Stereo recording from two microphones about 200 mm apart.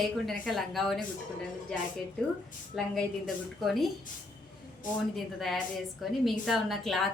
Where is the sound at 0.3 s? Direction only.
Centre (ahead or behind).